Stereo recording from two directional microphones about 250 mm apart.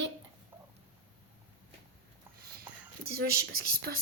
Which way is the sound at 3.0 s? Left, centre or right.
Right.